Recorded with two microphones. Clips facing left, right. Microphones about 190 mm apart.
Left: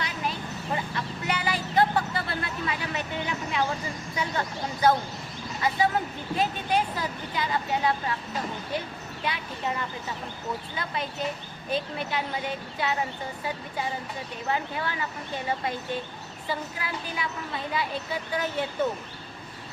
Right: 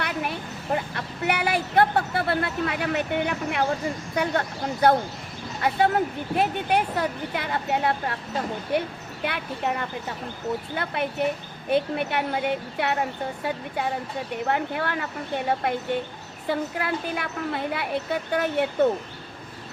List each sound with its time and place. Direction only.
0.0 s a woman's voice: 60° right (ahead or behind)